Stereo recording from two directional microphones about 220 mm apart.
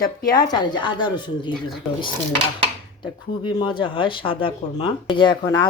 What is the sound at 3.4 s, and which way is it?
Speech, 20° left (ahead or behind).